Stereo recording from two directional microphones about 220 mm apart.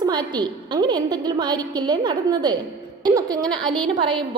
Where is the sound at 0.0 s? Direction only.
20° right (ahead or behind).